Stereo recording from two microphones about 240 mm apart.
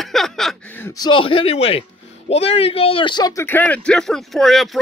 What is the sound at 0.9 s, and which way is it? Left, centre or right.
A man's voice, centre.